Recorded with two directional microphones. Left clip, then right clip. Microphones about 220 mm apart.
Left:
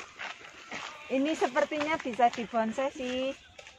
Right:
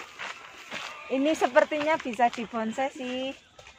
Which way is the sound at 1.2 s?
45° right (ahead or behind).